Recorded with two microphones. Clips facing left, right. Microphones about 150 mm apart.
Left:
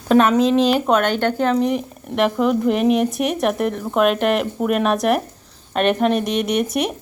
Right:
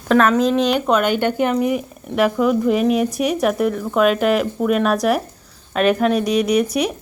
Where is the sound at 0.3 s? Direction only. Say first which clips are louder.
Left 1 dB; 30° left (ahead or behind).